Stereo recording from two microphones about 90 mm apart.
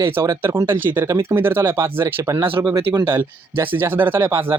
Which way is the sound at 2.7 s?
60° right (ahead or behind).